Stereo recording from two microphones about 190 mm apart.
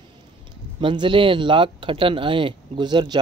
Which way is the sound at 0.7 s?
25° right (ahead or behind).